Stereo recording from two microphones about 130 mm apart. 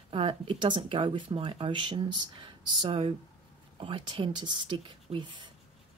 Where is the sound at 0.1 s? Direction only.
45° right (ahead or behind).